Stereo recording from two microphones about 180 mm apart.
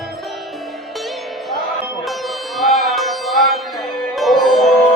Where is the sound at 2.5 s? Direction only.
Centre (ahead or behind).